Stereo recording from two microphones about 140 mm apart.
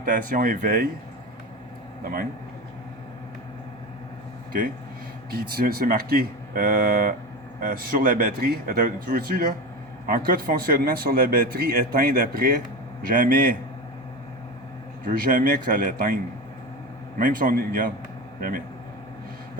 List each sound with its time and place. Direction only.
0.0 s speech: 70° right (ahead or behind)
5.3 s a man's voice: 90° right
13.1 s speech: 80° right
15.0 s a man's voice: 85° right
17.2 s a man's voice: 85° right